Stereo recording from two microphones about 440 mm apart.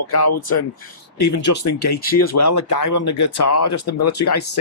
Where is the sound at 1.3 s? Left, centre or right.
Left.